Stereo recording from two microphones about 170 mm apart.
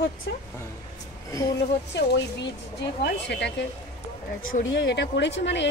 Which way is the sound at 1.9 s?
90° left.